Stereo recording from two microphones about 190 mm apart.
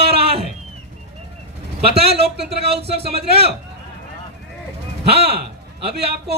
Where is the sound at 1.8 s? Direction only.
30° right (ahead or behind).